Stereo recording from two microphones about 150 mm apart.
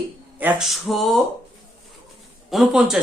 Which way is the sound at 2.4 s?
Centre (ahead or behind).